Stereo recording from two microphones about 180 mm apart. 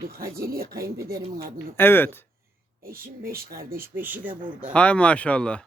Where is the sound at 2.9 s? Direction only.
55° right (ahead or behind).